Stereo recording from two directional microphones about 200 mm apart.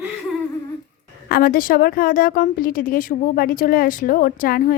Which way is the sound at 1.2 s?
45° left (ahead or behind).